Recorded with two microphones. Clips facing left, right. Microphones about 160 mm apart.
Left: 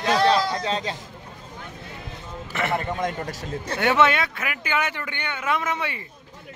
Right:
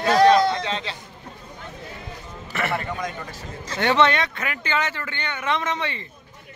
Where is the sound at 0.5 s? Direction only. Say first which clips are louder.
Left 1 dB; 35° left (ahead or behind).